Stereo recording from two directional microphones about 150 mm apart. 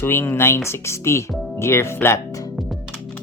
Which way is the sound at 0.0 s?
15° left (ahead or behind).